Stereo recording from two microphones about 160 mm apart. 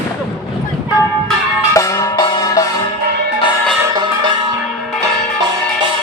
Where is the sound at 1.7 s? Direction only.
20° left (ahead or behind).